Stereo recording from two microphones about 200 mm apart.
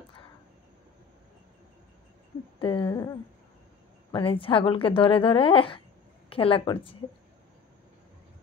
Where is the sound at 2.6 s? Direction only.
25° left (ahead or behind).